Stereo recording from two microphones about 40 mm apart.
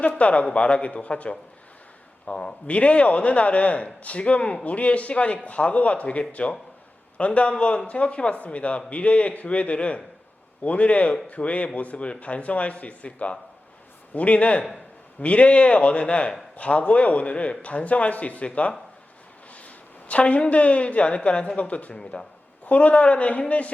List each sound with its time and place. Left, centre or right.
0.2 s a man's voice: left
21.9 s speech: left
22.6 s a man's voice: left